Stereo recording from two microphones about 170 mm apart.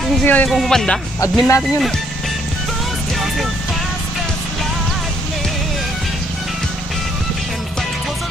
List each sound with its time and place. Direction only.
0.3 s speech: 5° left (ahead or behind)
1.2 s speech: 20° left (ahead or behind)